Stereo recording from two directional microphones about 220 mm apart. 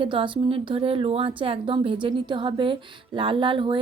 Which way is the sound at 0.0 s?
25° right (ahead or behind).